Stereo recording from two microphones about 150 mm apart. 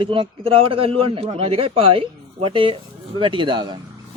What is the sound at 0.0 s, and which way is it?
A man's voice, 35° right (ahead or behind).